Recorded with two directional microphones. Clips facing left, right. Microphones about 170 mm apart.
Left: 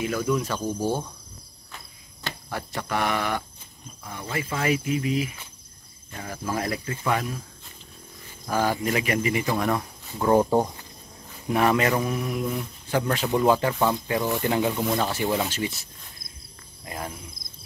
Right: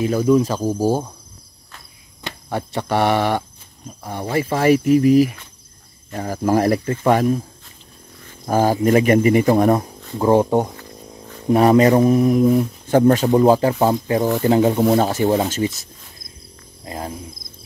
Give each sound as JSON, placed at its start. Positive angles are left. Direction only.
{"t": 0.0, "sound": "speech", "side_deg": -30}
{"t": 2.2, "sound": "speech", "side_deg": -25}
{"t": 6.1, "sound": "speech", "side_deg": -40}
{"t": 8.5, "sound": "speech", "side_deg": -40}
{"t": 11.5, "sound": "speech", "side_deg": -35}
{"t": 16.8, "sound": "speech", "side_deg": -30}